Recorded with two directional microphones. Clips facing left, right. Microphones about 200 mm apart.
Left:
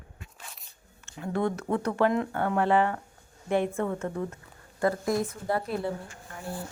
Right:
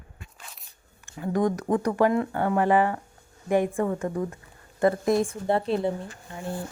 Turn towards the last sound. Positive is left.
turn(degrees=-20)  # may be behind; listen again after turning